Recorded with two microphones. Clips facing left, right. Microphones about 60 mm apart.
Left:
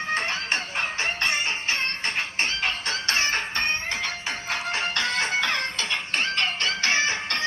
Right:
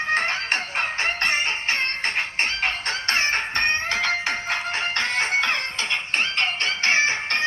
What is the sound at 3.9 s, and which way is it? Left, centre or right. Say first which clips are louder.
Music: right 6 dB; right.